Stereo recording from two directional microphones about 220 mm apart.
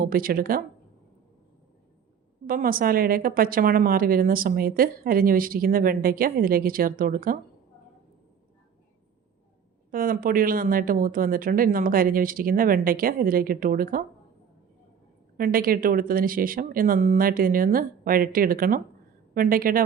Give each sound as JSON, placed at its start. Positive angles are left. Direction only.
{"t": 0.0, "sound": "a woman's voice", "side_deg": -40}
{"t": 2.5, "sound": "a woman's voice", "side_deg": -40}
{"t": 9.9, "sound": "a woman's voice", "side_deg": -40}
{"t": 15.4, "sound": "a woman's voice", "side_deg": -40}